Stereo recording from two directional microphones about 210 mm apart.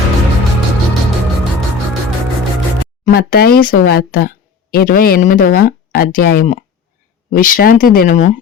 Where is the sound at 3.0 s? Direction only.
45° left (ahead or behind).